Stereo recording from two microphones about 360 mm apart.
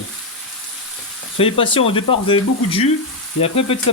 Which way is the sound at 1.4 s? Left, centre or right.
Centre.